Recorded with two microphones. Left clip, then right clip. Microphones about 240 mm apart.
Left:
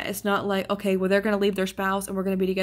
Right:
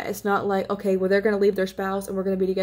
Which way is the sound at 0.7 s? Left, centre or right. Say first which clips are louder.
Right 2 dB; left.